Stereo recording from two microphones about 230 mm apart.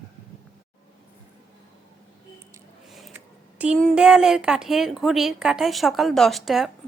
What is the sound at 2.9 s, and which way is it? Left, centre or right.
Speech, centre.